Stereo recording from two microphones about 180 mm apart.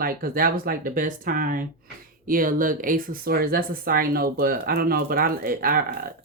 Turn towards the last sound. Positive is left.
turn(degrees=-55)  # may be behind; listen again after turning